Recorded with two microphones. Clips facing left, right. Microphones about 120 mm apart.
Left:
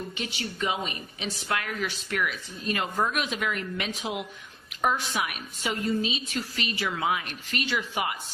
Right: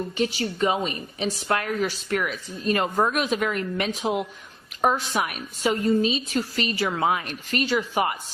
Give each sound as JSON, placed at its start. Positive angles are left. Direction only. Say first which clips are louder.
{"t": 0.2, "sound": "a woman's voice", "louder": "right 10 dB", "side_deg": -40}